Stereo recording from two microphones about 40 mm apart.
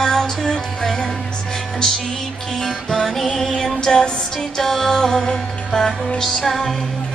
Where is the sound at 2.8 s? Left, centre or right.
Centre.